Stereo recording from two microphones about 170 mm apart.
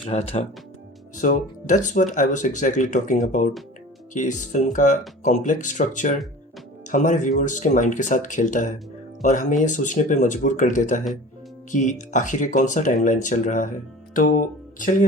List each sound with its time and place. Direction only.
0.0 s speech: 40° left (ahead or behind)
1.2 s speech: 50° left (ahead or behind)
14.1 s music: 55° left (ahead or behind)